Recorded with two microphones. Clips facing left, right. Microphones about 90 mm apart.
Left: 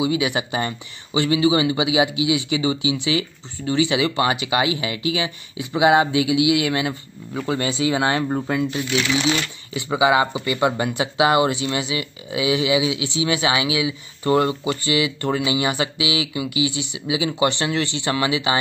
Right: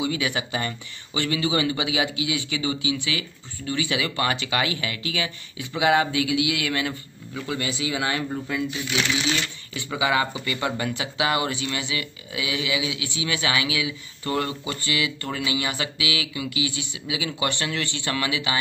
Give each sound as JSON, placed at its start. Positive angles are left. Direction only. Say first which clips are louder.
{"t": 0.0, "sound": "speech", "louder": "left 5 dB", "side_deg": 20}
{"t": 7.3, "sound": "speech", "louder": "left 6 dB", "side_deg": 35}
{"t": 9.8, "sound": "speech", "louder": "left 6 dB", "side_deg": 20}